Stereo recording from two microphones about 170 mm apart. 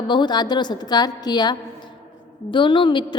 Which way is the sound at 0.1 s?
25° left (ahead or behind).